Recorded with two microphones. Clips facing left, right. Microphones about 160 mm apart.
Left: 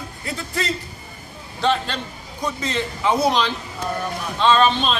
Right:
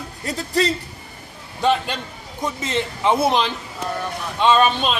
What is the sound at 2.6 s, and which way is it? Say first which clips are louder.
A man's voice: right 2 dB; 20° right (ahead or behind).